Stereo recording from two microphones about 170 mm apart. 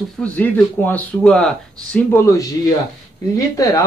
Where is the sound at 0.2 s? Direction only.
10° left (ahead or behind).